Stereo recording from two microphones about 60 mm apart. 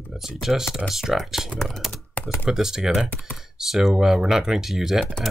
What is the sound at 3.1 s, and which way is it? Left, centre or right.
Speech, left.